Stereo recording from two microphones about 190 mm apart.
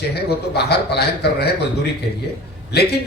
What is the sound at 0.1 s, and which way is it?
Speech, 60° left (ahead or behind).